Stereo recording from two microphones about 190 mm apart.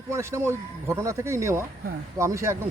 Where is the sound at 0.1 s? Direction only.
15° right (ahead or behind).